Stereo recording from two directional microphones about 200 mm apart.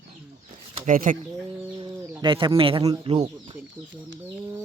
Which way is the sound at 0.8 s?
40° right (ahead or behind).